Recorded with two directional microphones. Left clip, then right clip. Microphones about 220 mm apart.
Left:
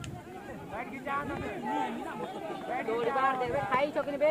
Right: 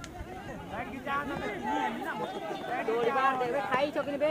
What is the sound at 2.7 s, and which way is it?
Speech, 50° right (ahead or behind).